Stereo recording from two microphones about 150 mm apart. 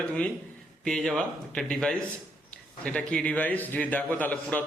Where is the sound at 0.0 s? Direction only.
5° left (ahead or behind).